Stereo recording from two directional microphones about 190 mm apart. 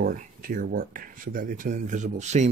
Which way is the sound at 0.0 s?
45° right (ahead or behind).